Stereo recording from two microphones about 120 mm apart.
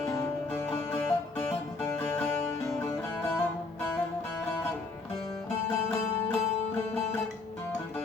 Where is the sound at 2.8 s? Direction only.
20° left (ahead or behind).